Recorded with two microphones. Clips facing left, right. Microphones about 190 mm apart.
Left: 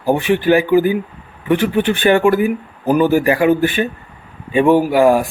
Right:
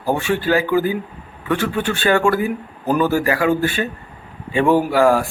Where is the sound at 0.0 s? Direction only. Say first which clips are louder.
Left 5 dB; 15° left (ahead or behind).